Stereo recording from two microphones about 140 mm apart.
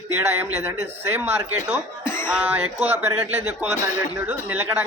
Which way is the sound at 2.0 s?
15° left (ahead or behind).